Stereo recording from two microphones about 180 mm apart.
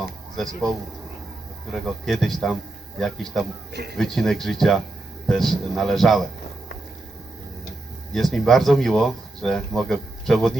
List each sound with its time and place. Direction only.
1.7 s speech: centre (ahead or behind)
3.7 s speech: 65° right (ahead or behind)
3.9 s speech: centre (ahead or behind)
8.1 s speech: centre (ahead or behind)